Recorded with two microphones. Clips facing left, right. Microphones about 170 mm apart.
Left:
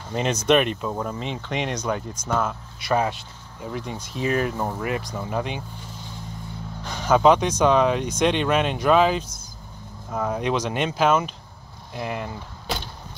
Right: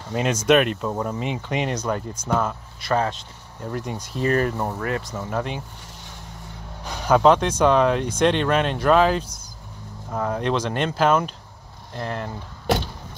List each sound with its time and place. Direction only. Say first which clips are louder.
0.1 s speech: right 1 dB; 5° right (ahead or behind)
2.4 s speech: right 1 dB; 10° left (ahead or behind)
4.7 s speech: even; 15° left (ahead or behind)
6.8 s vehicle: right 2 dB; 10° right (ahead or behind)
7.1 s speech: right 1 dB; 5° left (ahead or behind)